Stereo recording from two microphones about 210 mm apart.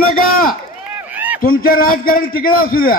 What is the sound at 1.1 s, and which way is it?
Run, 5° right (ahead or behind).